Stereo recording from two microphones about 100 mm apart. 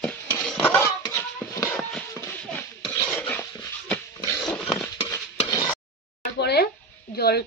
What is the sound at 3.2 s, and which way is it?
Dog, 20° left (ahead or behind).